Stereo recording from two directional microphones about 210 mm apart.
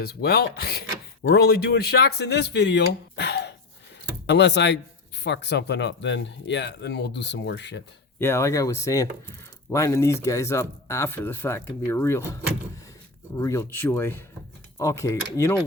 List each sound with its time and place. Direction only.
0.0 s speech: 50° left (ahead or behind)
8.2 s speech: 15° left (ahead or behind)
13.4 s speech: 15° left (ahead or behind)